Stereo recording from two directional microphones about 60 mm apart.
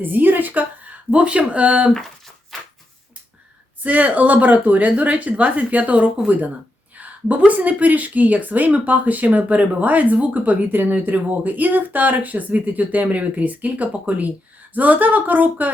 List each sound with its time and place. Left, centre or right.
0.0 s speech: right
2.5 s a sound: centre
3.8 s speech: right